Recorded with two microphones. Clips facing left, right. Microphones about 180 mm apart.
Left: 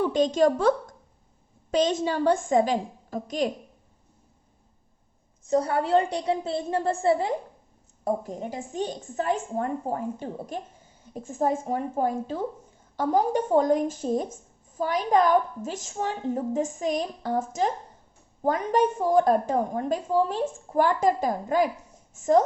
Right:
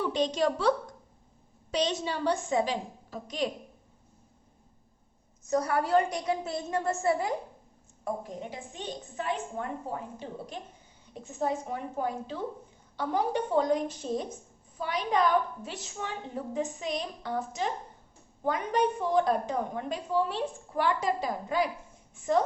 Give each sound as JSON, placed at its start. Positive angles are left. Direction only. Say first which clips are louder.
{"t": 0.0, "sound": "a woman's voice", "louder": "left 6 dB", "side_deg": 50}
{"t": 1.7, "sound": "a woman's voice", "louder": "left 6 dB", "side_deg": 50}
{"t": 5.5, "sound": "a woman's voice", "louder": "left 4 dB", "side_deg": 30}
{"t": 8.0, "sound": "a woman's voice", "louder": "left 6 dB", "side_deg": 40}